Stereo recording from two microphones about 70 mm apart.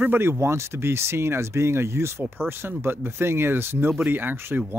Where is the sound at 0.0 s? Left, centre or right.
Right.